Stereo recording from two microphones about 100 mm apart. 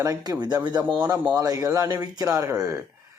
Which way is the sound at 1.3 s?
35° right (ahead or behind).